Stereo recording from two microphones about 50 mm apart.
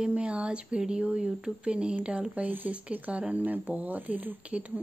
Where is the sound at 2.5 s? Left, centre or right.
Right.